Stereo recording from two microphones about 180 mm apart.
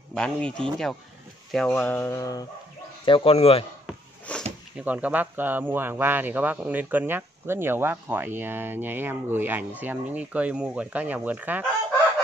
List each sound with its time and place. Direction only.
0.1 s speech: 5° left (ahead or behind)
3.1 s speech: 30° left (ahead or behind)
4.3 s a sound: 5° left (ahead or behind)
4.7 s speech: 10° right (ahead or behind)